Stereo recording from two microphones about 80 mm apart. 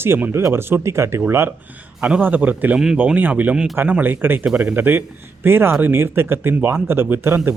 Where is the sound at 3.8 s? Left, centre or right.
Right.